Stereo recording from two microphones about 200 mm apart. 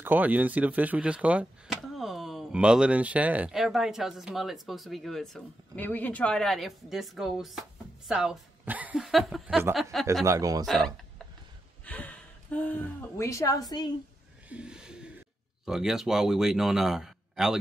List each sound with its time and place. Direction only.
0.0 s speech: 10° right (ahead or behind)
10.2 s speech: 15° right (ahead or behind)
10.6 s a woman's voice: centre (ahead or behind); by 13.8 s 20° left (ahead or behind)
14.5 s a sound: 5° right (ahead or behind)
15.6 s speech: centre (ahead or behind)